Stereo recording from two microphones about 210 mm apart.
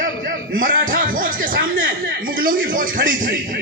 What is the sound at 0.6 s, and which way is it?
A man's voice, 40° right (ahead or behind).